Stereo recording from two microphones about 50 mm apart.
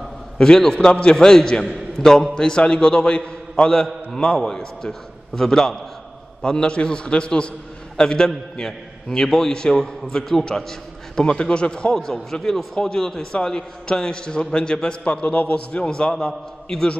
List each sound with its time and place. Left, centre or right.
0.4 s a man's voice: centre
3.8 s a man's voice: centre